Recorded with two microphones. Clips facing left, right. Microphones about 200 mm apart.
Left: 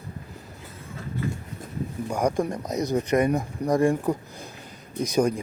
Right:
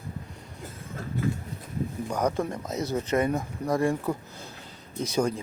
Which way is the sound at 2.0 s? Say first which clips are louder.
Left 3 dB; 10° left (ahead or behind).